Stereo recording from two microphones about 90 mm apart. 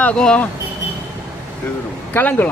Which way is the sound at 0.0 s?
10° left (ahead or behind).